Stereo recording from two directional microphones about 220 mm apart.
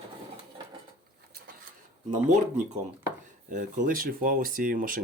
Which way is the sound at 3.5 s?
35° right (ahead or behind).